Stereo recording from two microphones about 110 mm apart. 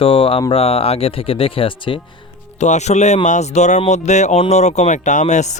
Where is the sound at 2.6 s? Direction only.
90° left.